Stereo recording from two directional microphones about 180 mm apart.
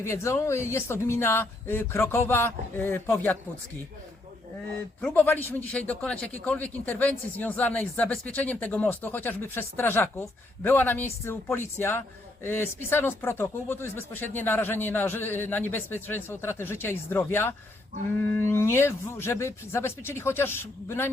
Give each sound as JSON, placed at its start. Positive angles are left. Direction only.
{"t": 0.0, "sound": "speech", "side_deg": 15}
{"t": 4.9, "sound": "speech", "side_deg": 10}